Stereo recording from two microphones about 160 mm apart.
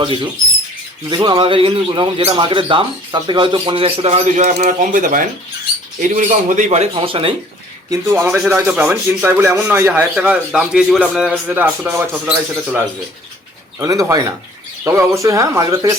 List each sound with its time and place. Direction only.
0.0 s a man's voice: 30° right (ahead or behind)
6.9 s speech: 35° right (ahead or behind)
7.9 s speech: 15° right (ahead or behind)